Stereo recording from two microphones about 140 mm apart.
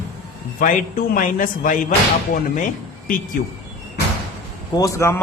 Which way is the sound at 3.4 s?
75° left (ahead or behind).